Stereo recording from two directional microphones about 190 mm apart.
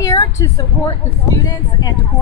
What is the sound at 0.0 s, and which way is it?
A woman's voice, 20° left (ahead or behind).